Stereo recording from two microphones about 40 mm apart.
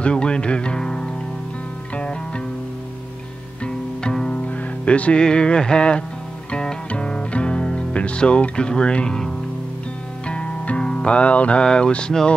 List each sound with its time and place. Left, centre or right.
0.0 s music: left
2.0 s music: left
4.1 s music: centre
4.5 s music: left
5.2 s a sound: left
6.5 s music: centre
10.2 s music: left
11.1 s a sound: left
11.6 s a sound: left